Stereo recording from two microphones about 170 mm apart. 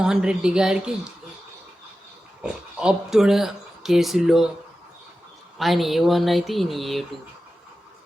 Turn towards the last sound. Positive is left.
turn(degrees=0)  # may be behind; listen again after turning